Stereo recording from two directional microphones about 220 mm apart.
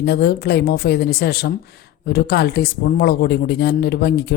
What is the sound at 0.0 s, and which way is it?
Speech, 45° left (ahead or behind).